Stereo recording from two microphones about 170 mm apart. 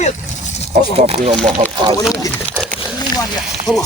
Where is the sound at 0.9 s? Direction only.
35° right (ahead or behind).